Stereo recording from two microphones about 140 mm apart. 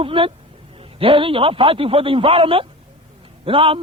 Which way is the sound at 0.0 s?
40° right (ahead or behind).